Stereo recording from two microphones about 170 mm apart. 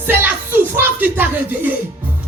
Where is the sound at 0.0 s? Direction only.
10° right (ahead or behind).